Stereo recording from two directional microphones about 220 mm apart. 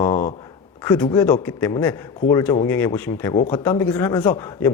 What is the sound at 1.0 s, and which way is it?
A man's voice, 15° left (ahead or behind).